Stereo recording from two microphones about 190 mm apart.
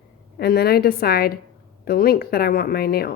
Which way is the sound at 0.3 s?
55° left (ahead or behind).